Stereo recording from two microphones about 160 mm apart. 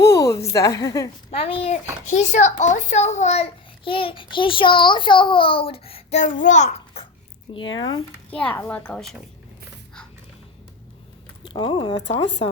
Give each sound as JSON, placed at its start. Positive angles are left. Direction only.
{"t": 0.0, "sound": "a woman's voice", "side_deg": 20}
{"t": 1.3, "sound": "a child's voice", "side_deg": 35}
{"t": 2.3, "sound": "a child's voice", "side_deg": 50}
{"t": 3.8, "sound": "a child's voice", "side_deg": 35}
{"t": 7.5, "sound": "speech", "side_deg": 30}
{"t": 8.3, "sound": "a woman's voice", "side_deg": 5}
{"t": 11.4, "sound": "a child's voice", "side_deg": 30}